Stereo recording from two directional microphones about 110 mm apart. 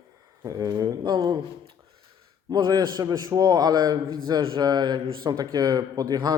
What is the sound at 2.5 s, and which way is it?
A man's voice, 40° right (ahead or behind).